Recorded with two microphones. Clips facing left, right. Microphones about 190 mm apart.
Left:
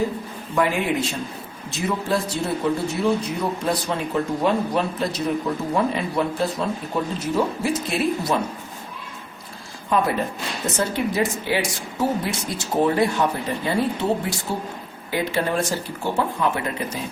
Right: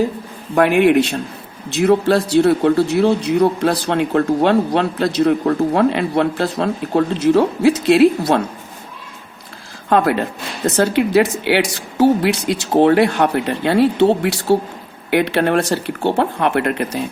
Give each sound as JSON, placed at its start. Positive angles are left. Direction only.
{"t": 0.5, "sound": "a man's voice", "side_deg": -70}
{"t": 9.9, "sound": "a man's voice", "side_deg": -80}